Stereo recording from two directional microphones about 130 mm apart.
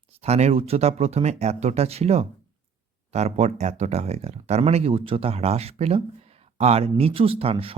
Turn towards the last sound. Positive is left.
turn(degrees=-45)  # may be behind; listen again after turning